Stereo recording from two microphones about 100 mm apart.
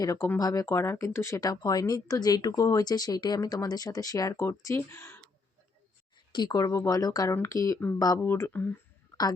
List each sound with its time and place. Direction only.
0.0 s speech: 35° left (ahead or behind)
6.3 s speech: 45° left (ahead or behind)
8.2 s speech: 25° left (ahead or behind)